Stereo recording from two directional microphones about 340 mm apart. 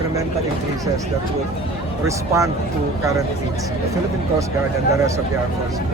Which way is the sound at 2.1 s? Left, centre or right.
Centre.